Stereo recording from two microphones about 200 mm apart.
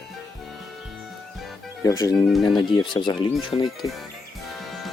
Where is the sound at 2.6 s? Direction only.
20° left (ahead or behind).